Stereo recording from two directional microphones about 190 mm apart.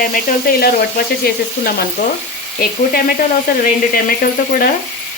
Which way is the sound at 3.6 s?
50° left (ahead or behind).